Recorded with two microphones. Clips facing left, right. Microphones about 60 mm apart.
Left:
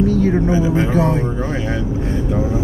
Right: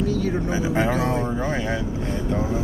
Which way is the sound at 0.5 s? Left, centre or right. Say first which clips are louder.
Left 6 dB; centre.